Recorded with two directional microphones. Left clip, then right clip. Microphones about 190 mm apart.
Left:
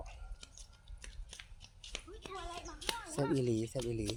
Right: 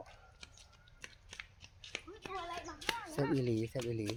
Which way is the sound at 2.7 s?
25° right (ahead or behind).